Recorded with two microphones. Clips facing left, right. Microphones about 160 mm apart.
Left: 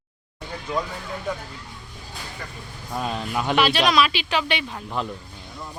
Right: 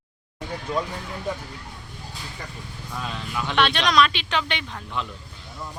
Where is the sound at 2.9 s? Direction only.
45° left (ahead or behind).